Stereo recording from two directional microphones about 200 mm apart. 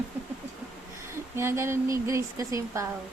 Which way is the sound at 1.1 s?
10° right (ahead or behind).